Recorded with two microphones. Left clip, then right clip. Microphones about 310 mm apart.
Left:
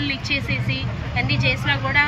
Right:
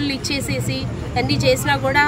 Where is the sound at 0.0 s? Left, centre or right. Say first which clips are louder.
Even; centre.